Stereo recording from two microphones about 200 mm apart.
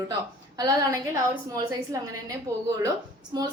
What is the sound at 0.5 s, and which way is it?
A woman's voice, 20° right (ahead or behind).